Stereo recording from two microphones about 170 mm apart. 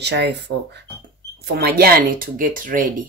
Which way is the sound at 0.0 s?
85° right.